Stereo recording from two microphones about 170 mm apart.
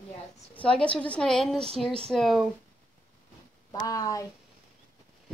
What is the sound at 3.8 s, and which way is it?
Speech, 20° left (ahead or behind).